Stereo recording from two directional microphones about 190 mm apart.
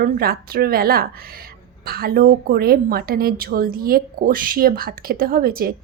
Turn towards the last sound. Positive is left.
turn(degrees=-50)  # may be behind; listen again after turning